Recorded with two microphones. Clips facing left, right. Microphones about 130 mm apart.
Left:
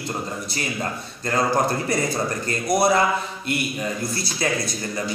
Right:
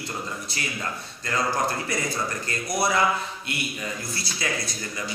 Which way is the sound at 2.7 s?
45° left (ahead or behind).